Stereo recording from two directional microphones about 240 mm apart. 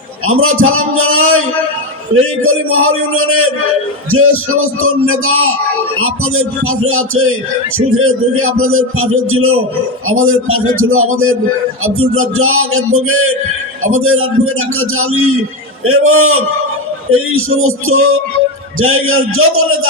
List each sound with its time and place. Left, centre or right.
0.3 s a man's voice: right